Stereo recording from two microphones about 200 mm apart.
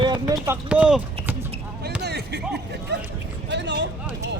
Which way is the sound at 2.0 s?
55° right (ahead or behind).